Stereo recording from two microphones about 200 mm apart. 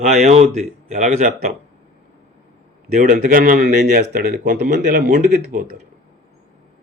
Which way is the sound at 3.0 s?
40° right (ahead or behind).